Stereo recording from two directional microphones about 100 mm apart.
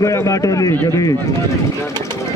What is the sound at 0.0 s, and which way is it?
Speech, 30° left (ahead or behind).